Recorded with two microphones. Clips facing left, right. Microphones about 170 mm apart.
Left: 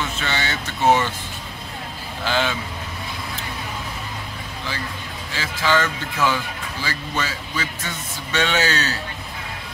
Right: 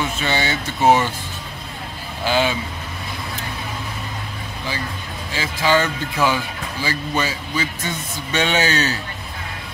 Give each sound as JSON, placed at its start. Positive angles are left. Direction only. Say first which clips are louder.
{"t": 0.2, "sound": "speech", "louder": "right 4 dB", "side_deg": -15}
{"t": 2.2, "sound": "speech", "louder": "right 3 dB", "side_deg": -15}
{"t": 5.3, "sound": "speech", "louder": "right 3 dB", "side_deg": -15}